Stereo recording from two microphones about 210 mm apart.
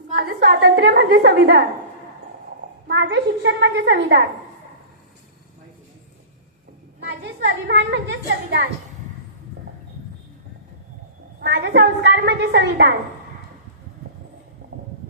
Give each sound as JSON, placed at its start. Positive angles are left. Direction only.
{"t": 0.1, "sound": "a woman's voice", "side_deg": -50}
{"t": 2.8, "sound": "a woman's voice", "side_deg": -55}
{"t": 7.0, "sound": "a woman's voice", "side_deg": -55}
{"t": 11.3, "sound": "a woman's voice", "side_deg": -50}